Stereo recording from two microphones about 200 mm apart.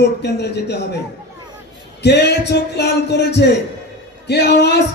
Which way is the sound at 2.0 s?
55° left (ahead or behind).